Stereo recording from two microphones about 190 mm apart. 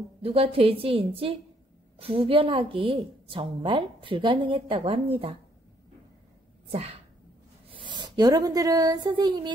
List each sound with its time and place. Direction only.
0.2 s a woman's voice: 30° right (ahead or behind)
7.7 s speech: 25° right (ahead or behind)